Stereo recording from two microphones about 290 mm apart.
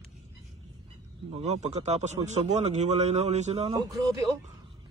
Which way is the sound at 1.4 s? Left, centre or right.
Right.